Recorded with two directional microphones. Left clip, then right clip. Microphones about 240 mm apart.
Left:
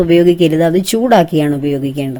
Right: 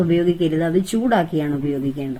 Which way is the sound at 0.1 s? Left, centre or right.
Left.